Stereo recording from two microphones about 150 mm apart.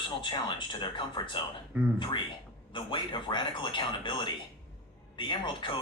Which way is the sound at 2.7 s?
30° left (ahead or behind).